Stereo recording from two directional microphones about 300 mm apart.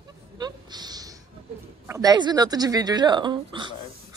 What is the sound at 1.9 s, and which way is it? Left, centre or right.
Speech, centre.